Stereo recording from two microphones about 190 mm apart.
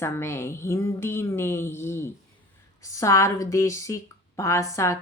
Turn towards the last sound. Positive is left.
turn(degrees=15)  # may be behind; listen again after turning